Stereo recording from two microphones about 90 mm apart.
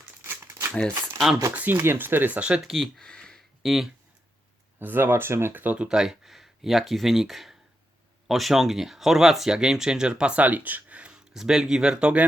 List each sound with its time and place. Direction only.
0.2 s crumpling: 25° right (ahead or behind)
0.7 s speech: 10° left (ahead or behind)
1.5 s speech: 25° right (ahead or behind)
2.7 s speech: 5° left (ahead or behind)
4.8 s speech: 20° right (ahead or behind)